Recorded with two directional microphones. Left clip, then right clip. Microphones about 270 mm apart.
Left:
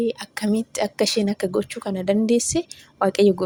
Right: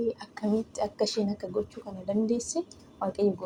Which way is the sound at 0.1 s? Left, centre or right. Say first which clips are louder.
Left 5 dB; left.